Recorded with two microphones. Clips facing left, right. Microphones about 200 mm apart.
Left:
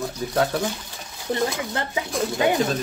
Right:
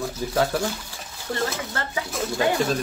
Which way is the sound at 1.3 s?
20° left (ahead or behind).